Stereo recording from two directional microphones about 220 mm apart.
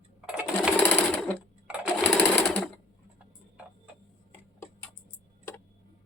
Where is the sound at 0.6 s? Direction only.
5° left (ahead or behind).